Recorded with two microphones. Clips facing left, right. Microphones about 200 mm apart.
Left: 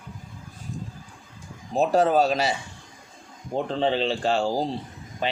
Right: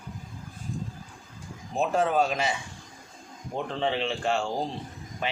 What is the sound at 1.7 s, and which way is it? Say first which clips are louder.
Speech: left 5 dB; 35° left (ahead or behind).